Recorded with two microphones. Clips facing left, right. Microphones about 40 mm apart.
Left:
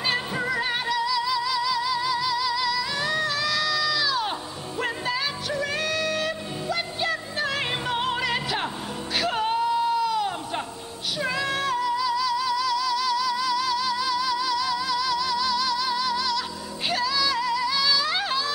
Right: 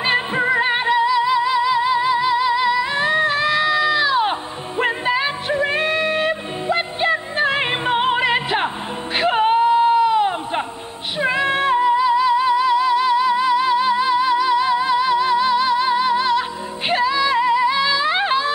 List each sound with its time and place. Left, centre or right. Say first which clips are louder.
0.0 s music: right 8 dB; right